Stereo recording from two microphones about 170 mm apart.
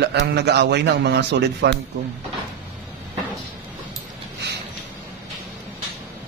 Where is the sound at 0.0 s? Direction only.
80° right.